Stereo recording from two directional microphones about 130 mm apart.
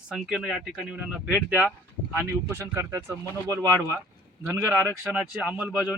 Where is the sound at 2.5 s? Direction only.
20° right (ahead or behind).